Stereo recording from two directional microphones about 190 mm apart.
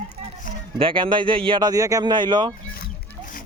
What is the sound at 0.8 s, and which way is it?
Speech, 25° right (ahead or behind).